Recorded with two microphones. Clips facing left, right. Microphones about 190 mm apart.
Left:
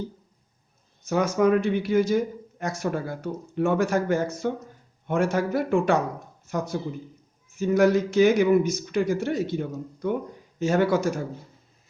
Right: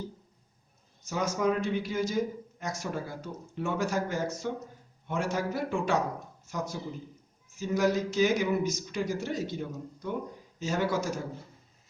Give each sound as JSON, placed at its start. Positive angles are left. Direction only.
{"t": 1.0, "sound": "speech", "side_deg": 60}